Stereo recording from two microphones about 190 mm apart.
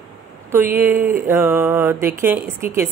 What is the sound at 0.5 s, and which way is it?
Speech, 10° right (ahead or behind).